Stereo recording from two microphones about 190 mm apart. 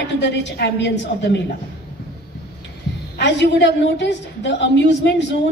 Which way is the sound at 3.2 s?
65° left (ahead or behind).